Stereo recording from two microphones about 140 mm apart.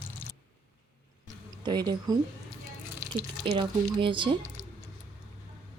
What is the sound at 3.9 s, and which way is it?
Speech, 35° right (ahead or behind).